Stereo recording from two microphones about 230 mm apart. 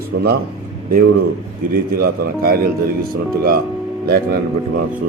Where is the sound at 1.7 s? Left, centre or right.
Right.